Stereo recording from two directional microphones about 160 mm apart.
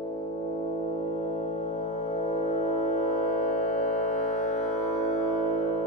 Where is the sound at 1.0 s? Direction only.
50° left (ahead or behind).